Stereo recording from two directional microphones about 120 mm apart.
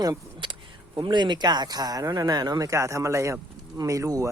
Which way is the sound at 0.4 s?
40° right (ahead or behind).